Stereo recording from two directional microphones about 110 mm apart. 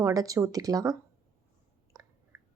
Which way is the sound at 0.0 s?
30° right (ahead or behind).